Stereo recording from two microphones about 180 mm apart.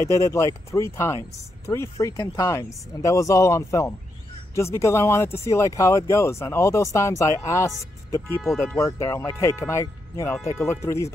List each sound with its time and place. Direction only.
0.0 s speech: 15° left (ahead or behind)